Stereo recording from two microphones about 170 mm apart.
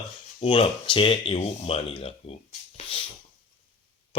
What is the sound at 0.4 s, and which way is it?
Speech, 30° left (ahead or behind).